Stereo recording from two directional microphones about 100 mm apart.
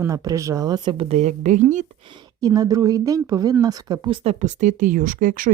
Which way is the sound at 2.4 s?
35° right (ahead or behind).